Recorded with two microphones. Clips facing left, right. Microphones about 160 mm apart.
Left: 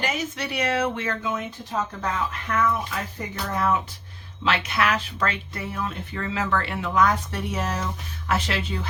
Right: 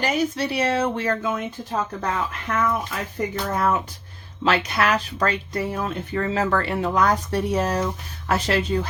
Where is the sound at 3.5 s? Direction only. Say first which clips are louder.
Left 1 dB; 45° right (ahead or behind).